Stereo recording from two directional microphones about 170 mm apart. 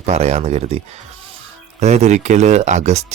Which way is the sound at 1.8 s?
40° right (ahead or behind).